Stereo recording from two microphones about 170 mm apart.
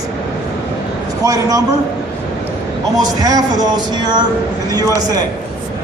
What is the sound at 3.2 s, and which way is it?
A man's voice, 20° right (ahead or behind).